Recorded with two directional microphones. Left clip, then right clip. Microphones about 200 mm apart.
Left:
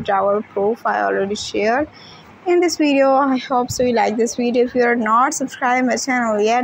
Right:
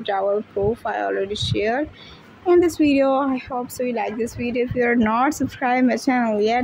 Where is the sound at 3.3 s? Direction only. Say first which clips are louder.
Left 8 dB; 10° left (ahead or behind).